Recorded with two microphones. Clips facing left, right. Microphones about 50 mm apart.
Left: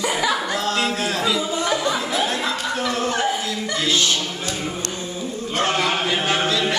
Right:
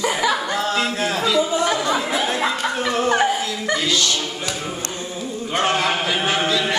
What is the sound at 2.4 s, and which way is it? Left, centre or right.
Chuckle, right.